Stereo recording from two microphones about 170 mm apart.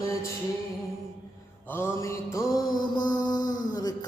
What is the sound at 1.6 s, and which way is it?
Mantra, 15° left (ahead or behind).